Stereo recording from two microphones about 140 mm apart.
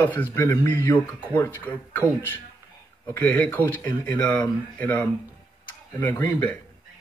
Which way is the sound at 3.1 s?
10° left (ahead or behind).